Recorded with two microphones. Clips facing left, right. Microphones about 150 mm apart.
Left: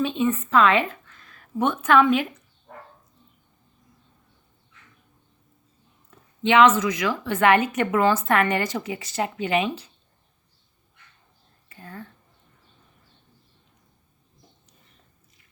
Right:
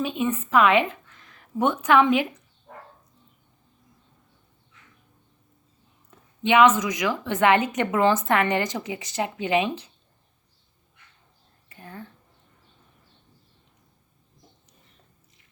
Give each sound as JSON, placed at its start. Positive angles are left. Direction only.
{"t": 0.0, "sound": "speech", "side_deg": -10}
{"t": 6.1, "sound": "a woman's voice", "side_deg": -15}
{"t": 11.7, "sound": "speech", "side_deg": -15}